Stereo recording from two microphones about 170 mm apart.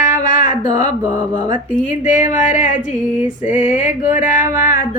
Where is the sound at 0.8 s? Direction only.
45° left (ahead or behind).